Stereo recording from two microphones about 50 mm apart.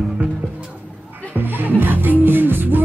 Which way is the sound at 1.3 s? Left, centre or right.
Right.